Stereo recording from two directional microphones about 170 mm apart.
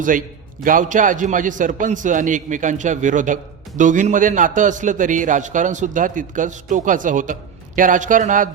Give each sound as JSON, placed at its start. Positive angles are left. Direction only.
{"t": 0.6, "sound": "a man's voice", "side_deg": -50}